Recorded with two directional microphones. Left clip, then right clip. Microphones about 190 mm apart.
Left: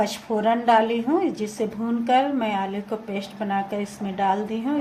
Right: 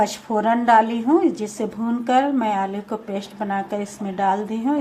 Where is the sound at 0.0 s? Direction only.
20° right (ahead or behind).